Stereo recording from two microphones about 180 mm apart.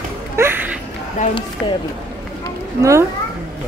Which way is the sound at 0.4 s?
10° right (ahead or behind).